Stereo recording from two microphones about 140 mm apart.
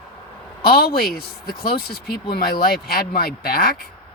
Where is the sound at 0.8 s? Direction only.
90° left.